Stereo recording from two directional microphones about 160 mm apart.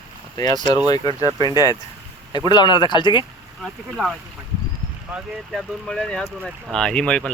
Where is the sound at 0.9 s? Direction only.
25° left (ahead or behind).